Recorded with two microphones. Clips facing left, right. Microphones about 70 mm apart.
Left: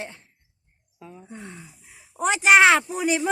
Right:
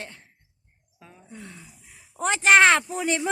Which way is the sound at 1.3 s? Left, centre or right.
Left.